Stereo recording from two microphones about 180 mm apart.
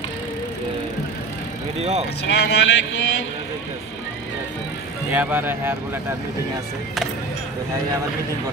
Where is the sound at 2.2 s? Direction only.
70° left (ahead or behind).